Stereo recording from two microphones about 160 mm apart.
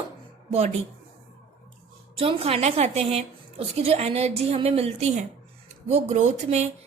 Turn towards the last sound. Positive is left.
turn(degrees=-45)  # may be behind; listen again after turning